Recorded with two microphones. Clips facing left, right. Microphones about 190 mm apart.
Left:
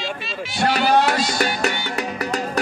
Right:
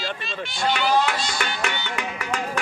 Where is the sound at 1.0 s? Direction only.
40° left (ahead or behind).